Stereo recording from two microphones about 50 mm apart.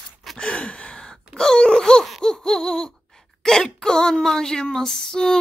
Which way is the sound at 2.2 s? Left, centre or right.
Centre.